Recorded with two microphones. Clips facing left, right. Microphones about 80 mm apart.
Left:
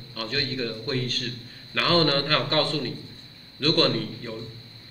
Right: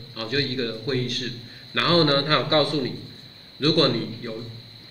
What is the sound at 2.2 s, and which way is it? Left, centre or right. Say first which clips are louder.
A man's voice: right 3 dB; centre.